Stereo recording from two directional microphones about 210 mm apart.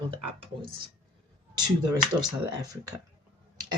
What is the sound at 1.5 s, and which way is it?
Speech, 20° right (ahead or behind).